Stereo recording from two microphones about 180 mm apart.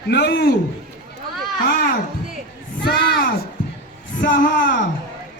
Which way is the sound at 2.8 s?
65° left (ahead or behind).